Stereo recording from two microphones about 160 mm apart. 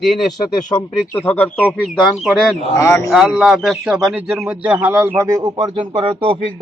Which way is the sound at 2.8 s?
20° left (ahead or behind).